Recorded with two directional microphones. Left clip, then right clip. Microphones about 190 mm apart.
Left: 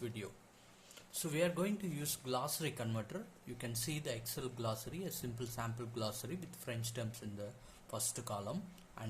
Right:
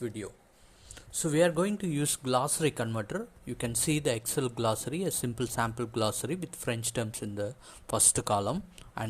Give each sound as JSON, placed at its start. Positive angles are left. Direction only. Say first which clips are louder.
{"t": 0.0, "sound": "speech", "louder": "right 8 dB", "side_deg": -30}